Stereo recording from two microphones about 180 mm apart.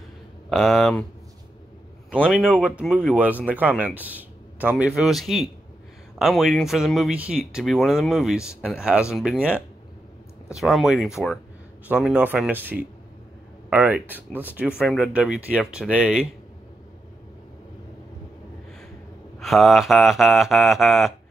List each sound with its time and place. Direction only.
0.5 s speech: centre (ahead or behind)
2.2 s speech: 5° right (ahead or behind)
8.4 s speech: 15° left (ahead or behind)
8.6 s speech: 5° right (ahead or behind)
19.4 s speech: centre (ahead or behind)